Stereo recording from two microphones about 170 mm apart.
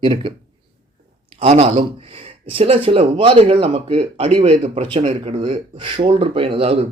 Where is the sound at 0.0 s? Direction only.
30° right (ahead or behind).